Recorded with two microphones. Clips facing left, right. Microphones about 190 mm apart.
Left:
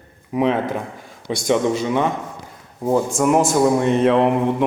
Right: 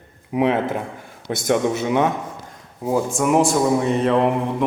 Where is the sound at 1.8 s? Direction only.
15° right (ahead or behind).